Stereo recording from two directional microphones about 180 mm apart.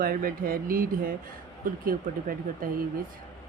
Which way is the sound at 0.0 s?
55° right (ahead or behind).